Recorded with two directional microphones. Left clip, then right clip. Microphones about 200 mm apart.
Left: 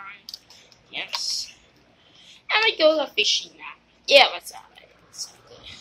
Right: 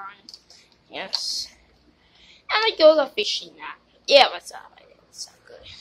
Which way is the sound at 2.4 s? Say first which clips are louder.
Right 3 dB; 10° right (ahead or behind).